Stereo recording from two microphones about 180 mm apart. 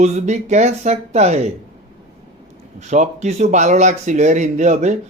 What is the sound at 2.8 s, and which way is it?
A man's voice, 40° right (ahead or behind).